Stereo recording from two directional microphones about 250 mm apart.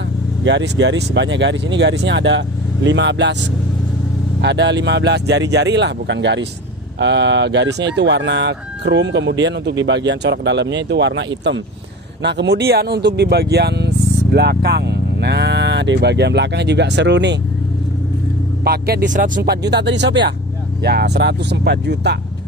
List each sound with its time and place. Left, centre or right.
0.4 s speech: right
4.4 s speech: right
18.6 s speech: right